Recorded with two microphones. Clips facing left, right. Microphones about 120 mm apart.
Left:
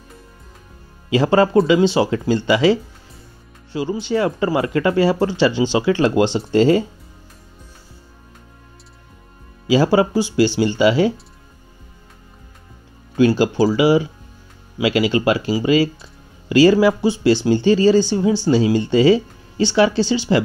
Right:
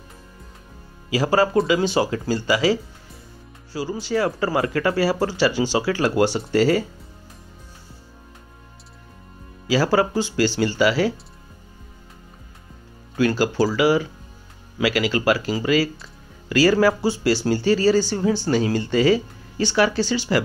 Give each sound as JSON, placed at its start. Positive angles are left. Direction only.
{"t": 1.1, "sound": "speech", "side_deg": 25}
{"t": 9.7, "sound": "speech", "side_deg": 20}
{"t": 13.2, "sound": "speech", "side_deg": 20}